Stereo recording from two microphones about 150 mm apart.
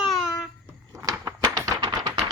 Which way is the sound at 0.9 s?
20° right (ahead or behind).